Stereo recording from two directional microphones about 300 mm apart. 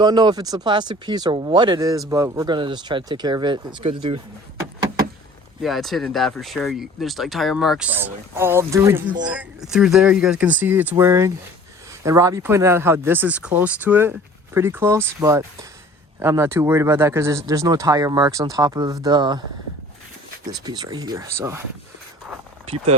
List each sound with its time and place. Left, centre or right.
0.0 s speech: centre
5.6 s speech: centre
20.5 s speech: centre
22.6 s speech: centre